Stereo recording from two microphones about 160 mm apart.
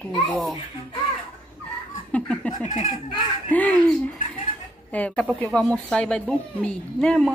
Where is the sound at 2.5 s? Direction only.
50° left (ahead or behind).